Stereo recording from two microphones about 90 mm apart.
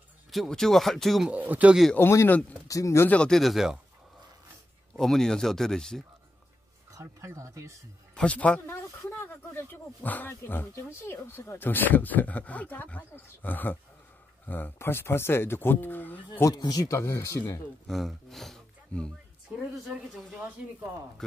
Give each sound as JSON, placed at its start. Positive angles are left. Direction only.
{"t": 0.3, "sound": "speech", "side_deg": 0}
{"t": 1.3, "sound": "speech", "side_deg": -15}
{"t": 2.0, "sound": "speech", "side_deg": 30}
{"t": 3.1, "sound": "speech", "side_deg": 10}
{"t": 4.9, "sound": "speech", "side_deg": 5}
{"t": 7.0, "sound": "speech", "side_deg": -35}
{"t": 8.1, "sound": "speech", "side_deg": 10}
{"t": 8.6, "sound": "speech", "side_deg": 25}
{"t": 16.5, "sound": "speech", "side_deg": 45}
{"t": 17.8, "sound": "speech", "side_deg": 0}